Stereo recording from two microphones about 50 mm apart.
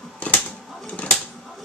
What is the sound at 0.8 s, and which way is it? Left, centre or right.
Typewriter, left.